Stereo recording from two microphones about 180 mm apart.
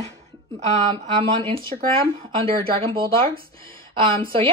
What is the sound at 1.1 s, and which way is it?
A woman's voice, 30° right (ahead or behind).